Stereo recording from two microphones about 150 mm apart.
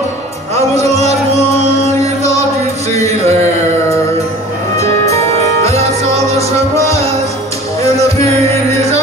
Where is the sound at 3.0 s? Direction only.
45° right (ahead or behind).